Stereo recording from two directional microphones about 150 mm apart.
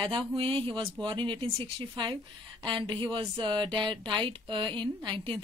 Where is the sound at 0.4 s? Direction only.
35° right (ahead or behind).